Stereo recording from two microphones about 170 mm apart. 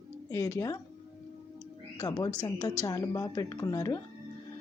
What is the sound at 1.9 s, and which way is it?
A woman's voice, 20° left (ahead or behind).